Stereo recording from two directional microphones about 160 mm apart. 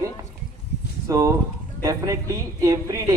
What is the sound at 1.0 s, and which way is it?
A man's voice, 20° right (ahead or behind).